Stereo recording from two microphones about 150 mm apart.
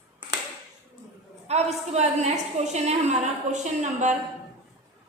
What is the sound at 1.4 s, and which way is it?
A woman's voice, 45° right (ahead or behind).